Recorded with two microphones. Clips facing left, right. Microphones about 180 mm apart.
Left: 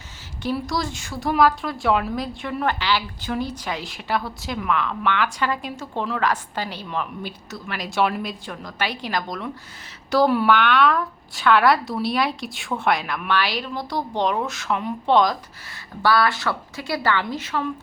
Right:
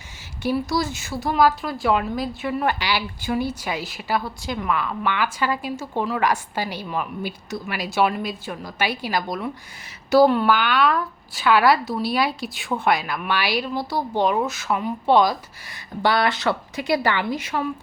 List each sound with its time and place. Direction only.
0.4 s a woman's voice: 5° right (ahead or behind)
16.0 s a woman's voice: 20° right (ahead or behind)